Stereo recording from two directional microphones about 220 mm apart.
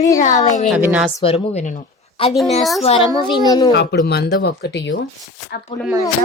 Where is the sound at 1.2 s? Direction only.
25° left (ahead or behind).